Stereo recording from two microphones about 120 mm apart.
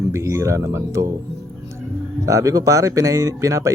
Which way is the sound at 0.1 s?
25° right (ahead or behind).